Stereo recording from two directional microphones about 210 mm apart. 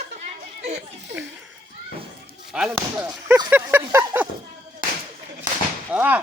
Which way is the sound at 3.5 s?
10° right (ahead or behind).